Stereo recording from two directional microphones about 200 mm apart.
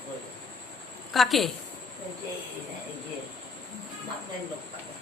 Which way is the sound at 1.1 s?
Centre (ahead or behind).